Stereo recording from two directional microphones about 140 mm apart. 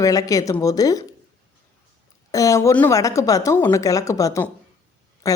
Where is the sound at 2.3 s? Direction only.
25° left (ahead or behind).